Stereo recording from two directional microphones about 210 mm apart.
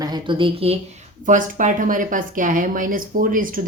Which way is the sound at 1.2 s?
40° right (ahead or behind).